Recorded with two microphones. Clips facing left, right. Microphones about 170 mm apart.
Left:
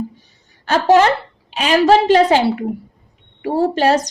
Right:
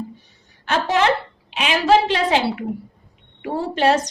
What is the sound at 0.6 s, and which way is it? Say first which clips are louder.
A woman's voice: left 7 dB; 40° left (ahead or behind).